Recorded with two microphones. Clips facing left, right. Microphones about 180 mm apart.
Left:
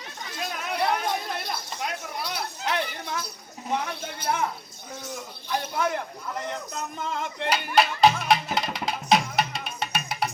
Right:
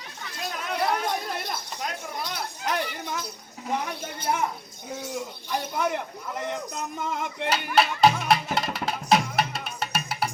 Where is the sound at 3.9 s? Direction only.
15° right (ahead or behind).